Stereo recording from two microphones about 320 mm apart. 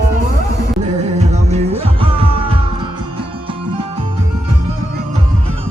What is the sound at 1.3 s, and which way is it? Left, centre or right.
Music, centre.